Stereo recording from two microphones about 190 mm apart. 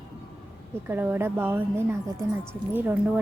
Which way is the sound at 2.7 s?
10° right (ahead or behind).